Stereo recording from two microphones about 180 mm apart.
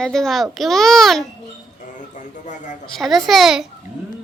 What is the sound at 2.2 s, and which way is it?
Speech, 45° left (ahead or behind).